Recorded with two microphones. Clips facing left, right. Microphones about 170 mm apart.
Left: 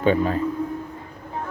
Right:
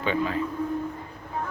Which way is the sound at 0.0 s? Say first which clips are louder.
Left 6 dB; 40° left (ahead or behind).